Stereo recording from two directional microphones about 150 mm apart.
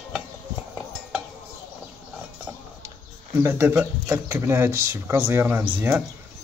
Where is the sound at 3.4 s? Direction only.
15° right (ahead or behind).